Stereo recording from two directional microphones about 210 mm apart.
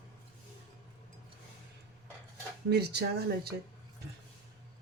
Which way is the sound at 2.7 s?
50° right (ahead or behind).